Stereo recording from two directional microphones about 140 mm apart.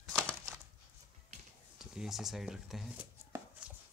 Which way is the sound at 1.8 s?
5° right (ahead or behind).